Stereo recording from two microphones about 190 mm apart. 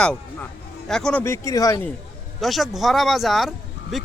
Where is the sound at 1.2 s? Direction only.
15° left (ahead or behind).